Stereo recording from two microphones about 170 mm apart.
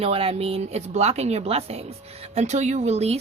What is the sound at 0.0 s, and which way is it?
Speech, 35° right (ahead or behind).